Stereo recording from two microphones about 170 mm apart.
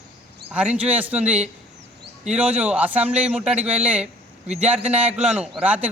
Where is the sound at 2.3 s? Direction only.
5° right (ahead or behind).